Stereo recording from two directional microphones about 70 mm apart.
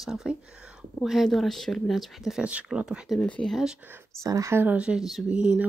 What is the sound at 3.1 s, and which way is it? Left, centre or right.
Speech, centre.